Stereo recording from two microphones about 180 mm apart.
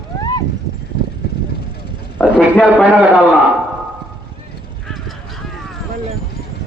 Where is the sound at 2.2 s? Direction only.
5° left (ahead or behind).